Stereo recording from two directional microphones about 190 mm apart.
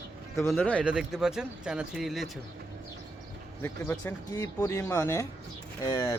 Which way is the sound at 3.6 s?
10° left (ahead or behind).